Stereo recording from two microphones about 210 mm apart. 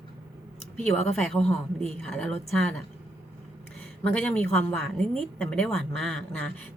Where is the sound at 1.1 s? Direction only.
Centre (ahead or behind).